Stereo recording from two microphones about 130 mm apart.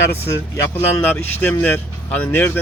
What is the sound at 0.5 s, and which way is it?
Speech, 20° left (ahead or behind).